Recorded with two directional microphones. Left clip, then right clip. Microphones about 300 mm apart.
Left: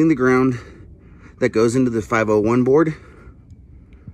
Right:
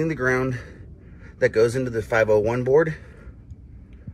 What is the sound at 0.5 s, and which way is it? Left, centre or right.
Speech, centre.